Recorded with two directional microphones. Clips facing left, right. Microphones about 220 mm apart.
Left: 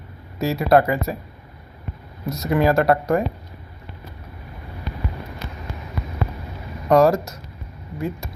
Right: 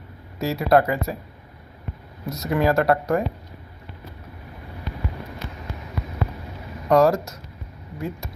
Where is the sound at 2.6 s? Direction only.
20° left (ahead or behind).